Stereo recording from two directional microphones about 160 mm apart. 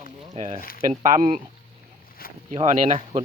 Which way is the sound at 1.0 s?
55° right (ahead or behind).